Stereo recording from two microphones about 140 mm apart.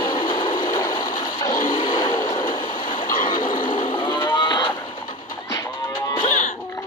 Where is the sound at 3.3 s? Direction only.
35° left (ahead or behind).